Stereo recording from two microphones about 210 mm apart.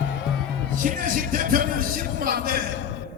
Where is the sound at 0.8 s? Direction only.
40° right (ahead or behind).